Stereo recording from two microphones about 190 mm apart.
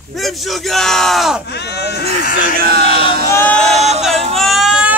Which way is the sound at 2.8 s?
30° left (ahead or behind).